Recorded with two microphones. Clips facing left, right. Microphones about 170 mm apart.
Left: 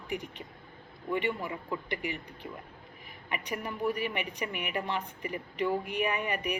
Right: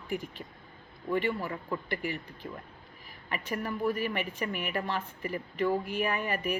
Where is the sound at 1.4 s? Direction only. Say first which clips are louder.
Right 1 dB; 15° left (ahead or behind).